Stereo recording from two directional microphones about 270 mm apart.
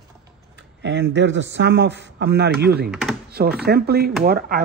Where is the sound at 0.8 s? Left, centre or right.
Right.